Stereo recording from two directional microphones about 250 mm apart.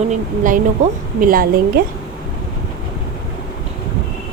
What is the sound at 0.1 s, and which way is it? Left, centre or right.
A woman's voice, right.